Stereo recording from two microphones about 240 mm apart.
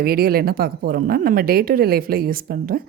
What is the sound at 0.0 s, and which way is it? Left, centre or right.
Speech, right.